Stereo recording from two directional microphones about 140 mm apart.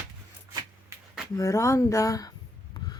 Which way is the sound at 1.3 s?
20° left (ahead or behind).